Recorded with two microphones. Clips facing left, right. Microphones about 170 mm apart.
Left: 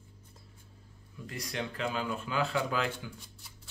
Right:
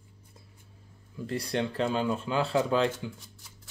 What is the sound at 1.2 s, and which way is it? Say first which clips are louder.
Speech: right 8 dB; 35° right (ahead or behind).